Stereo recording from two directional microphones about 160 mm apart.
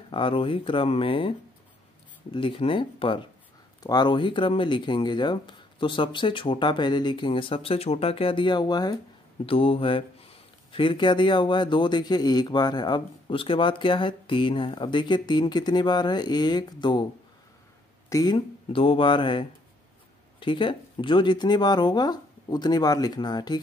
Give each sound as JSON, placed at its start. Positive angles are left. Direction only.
{"t": 0.1, "sound": "speech", "side_deg": 35}
{"t": 2.3, "sound": "speech", "side_deg": 35}
{"t": 9.5, "sound": "speech", "side_deg": 35}
{"t": 18.1, "sound": "speech", "side_deg": 25}